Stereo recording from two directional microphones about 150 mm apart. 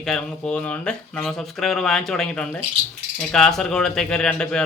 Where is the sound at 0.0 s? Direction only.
5° left (ahead or behind).